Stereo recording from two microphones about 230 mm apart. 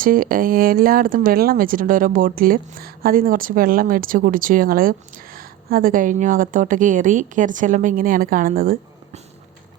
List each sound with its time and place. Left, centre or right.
0.0 s speech: right